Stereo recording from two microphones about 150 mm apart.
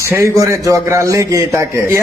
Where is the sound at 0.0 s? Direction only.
20° right (ahead or behind).